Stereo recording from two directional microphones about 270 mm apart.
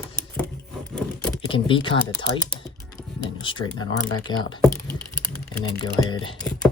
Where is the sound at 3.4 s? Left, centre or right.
Centre.